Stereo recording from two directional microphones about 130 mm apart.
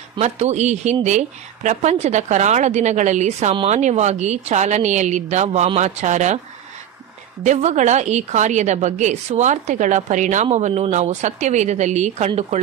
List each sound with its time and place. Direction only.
0.2 s a woman's voice: 60° right (ahead or behind)
7.4 s a woman's voice: 65° right (ahead or behind)